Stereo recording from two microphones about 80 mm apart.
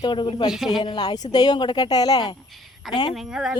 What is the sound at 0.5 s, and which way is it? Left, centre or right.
Speech, centre.